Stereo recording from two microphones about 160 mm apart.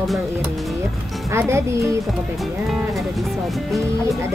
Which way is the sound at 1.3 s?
15° right (ahead or behind).